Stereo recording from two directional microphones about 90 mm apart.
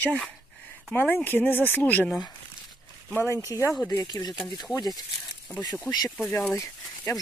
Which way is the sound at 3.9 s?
45° left (ahead or behind).